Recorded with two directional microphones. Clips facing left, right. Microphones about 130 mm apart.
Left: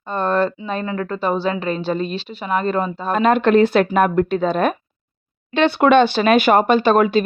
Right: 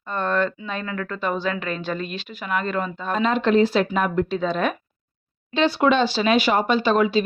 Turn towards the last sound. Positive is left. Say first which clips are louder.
# left 5 dB
turn(degrees=50)  # may be behind; listen again after turning